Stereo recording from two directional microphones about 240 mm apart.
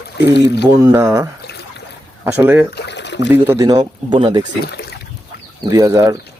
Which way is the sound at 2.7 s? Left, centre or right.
Left.